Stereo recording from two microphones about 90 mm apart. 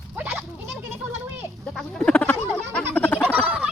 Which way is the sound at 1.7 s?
Centre (ahead or behind).